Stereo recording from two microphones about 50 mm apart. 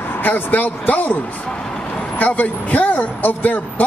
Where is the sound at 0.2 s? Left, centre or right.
Left.